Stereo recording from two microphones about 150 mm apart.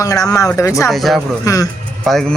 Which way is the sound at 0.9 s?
Centre (ahead or behind).